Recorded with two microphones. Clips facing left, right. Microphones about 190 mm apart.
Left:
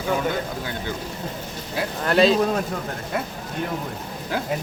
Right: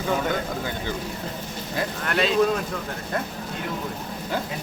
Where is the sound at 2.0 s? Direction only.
35° left (ahead or behind).